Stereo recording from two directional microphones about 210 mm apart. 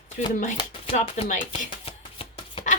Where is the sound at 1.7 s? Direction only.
25° left (ahead or behind).